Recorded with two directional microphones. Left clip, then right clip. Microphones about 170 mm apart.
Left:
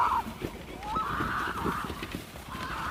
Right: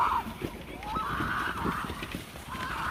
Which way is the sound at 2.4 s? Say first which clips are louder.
Right 2 dB; 10° left (ahead or behind).